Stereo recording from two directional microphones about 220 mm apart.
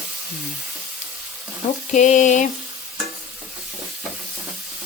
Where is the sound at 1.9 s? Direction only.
35° left (ahead or behind).